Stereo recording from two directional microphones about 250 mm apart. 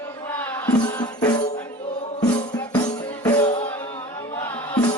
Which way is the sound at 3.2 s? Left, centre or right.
Centre.